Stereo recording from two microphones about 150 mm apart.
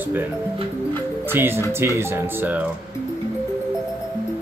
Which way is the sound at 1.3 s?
15° right (ahead or behind).